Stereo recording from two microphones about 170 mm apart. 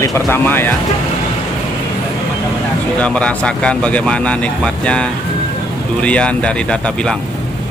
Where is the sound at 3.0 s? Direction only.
5° left (ahead or behind).